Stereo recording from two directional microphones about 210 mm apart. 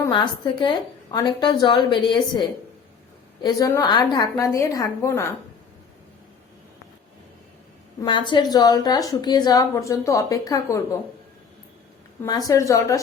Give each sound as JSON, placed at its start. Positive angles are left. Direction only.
{"t": 0.0, "sound": "a woman's voice", "side_deg": 20}
{"t": 3.4, "sound": "a woman's voice", "side_deg": 15}
{"t": 8.0, "sound": "a woman's voice", "side_deg": 20}
{"t": 12.2, "sound": "a woman's voice", "side_deg": 15}